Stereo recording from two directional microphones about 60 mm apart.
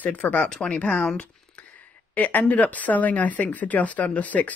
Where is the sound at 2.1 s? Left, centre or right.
Left.